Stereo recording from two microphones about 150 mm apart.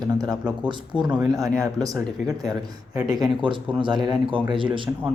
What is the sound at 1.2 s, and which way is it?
Speech, 25° right (ahead or behind).